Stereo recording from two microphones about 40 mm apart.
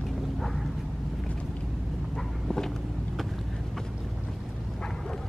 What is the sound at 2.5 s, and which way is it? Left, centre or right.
Vehicle, centre.